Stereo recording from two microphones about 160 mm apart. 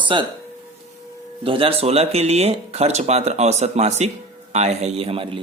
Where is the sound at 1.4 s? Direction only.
35° right (ahead or behind).